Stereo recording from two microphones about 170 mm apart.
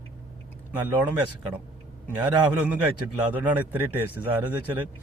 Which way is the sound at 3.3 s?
10° right (ahead or behind).